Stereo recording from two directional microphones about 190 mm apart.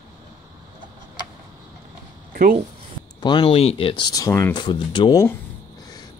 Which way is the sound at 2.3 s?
45° right (ahead or behind).